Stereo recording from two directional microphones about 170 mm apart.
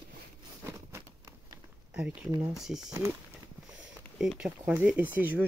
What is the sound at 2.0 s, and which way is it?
Speech, 5° right (ahead or behind).